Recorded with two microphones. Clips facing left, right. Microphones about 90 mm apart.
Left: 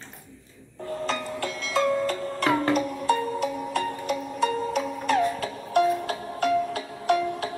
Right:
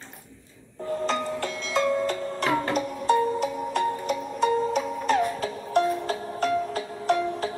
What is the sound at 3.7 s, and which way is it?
Music, 5° left (ahead or behind).